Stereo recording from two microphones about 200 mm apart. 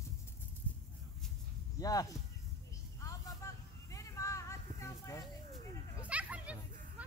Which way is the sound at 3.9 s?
15° left (ahead or behind).